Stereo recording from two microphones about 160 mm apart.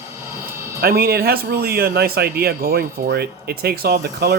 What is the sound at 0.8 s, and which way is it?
Speech, 75° right (ahead or behind).